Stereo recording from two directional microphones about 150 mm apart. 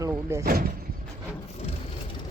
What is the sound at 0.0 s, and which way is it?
Vehicle, 20° right (ahead or behind).